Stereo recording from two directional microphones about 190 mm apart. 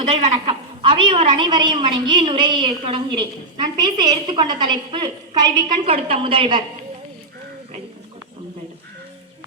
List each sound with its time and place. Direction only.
0.1 s a woman's voice: 30° right (ahead or behind)